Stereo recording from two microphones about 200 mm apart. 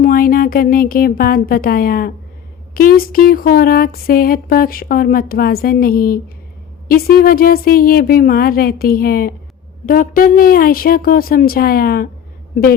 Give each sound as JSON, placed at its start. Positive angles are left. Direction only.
{"t": 0.0, "sound": "speech", "side_deg": 45}